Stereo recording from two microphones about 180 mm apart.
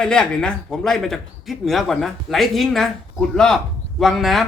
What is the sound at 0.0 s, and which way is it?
Speech, 5° left (ahead or behind).